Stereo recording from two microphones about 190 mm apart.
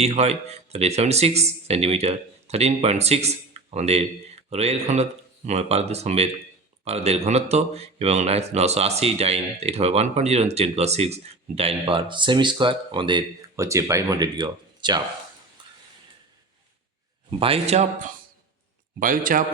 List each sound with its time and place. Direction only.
0.0 s a man's voice: 35° right (ahead or behind)
17.4 s a man's voice: 35° right (ahead or behind)